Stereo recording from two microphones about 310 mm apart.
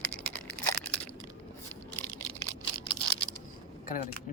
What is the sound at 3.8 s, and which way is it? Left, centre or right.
Speech, left.